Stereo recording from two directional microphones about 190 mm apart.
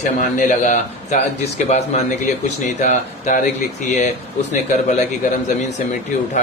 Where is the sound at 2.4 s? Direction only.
40° left (ahead or behind).